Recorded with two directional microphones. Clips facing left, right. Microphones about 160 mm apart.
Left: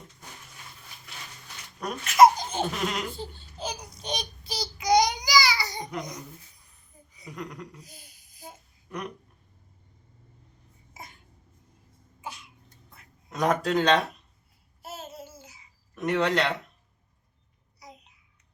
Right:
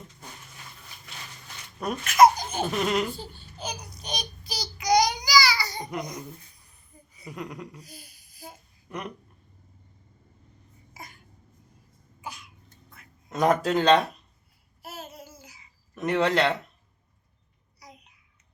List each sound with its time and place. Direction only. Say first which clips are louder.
2.0 s speech: even; 25° left (ahead or behind)
2.6 s speech: right 3 dB; centre (ahead or behind)
3.6 s babbling: left 1 dB; 25° left (ahead or behind)
4.2 s child singing: left 2 dB; 25° left (ahead or behind)
5.9 s speech: right 2 dB; centre (ahead or behind)
7.3 s a sound: right 1 dB; 10° right (ahead or behind)
7.8 s a sound: right 3 dB; 20° left (ahead or behind)
8.9 s speech: even; 5° right (ahead or behind)
10.9 s a sound: even; 25° left (ahead or behind)
12.2 s cough: even; 25° left (ahead or behind)
13.3 s speech: right 2 dB; centre (ahead or behind)
14.8 s babbling: left 1 dB; 25° left (ahead or behind)
16.0 s speech: right 2 dB; centre (ahead or behind)
17.7 s babbling: left 2 dB; 25° left (ahead or behind)